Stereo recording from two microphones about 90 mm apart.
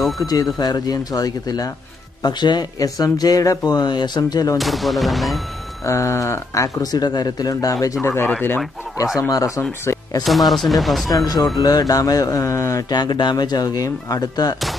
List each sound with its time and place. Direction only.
0.3 s speech: 45° left (ahead or behind)
4.6 s speech: centre (ahead or behind)
5.9 s speech: 35° left (ahead or behind)
8.0 s speech: 25° left (ahead or behind)
9.0 s speech: 40° left (ahead or behind)
9.6 s speech: 25° left (ahead or behind)
10.5 s speech: centre (ahead or behind)
11.1 s speech: 45° left (ahead or behind)
12.9 s speech: 50° left (ahead or behind)